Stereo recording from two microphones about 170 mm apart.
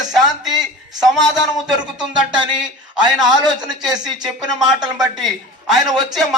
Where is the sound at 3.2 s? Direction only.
25° right (ahead or behind).